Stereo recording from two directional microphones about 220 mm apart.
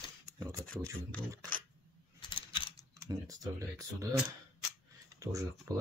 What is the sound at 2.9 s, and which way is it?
Speech, 15° right (ahead or behind).